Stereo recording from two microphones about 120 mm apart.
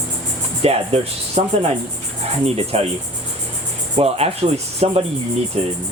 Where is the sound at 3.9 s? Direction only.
60° right (ahead or behind).